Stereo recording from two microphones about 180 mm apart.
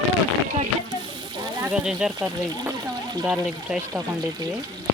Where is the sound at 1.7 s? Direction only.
5° right (ahead or behind).